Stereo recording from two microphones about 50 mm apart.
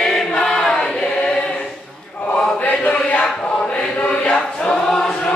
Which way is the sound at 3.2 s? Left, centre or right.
Left.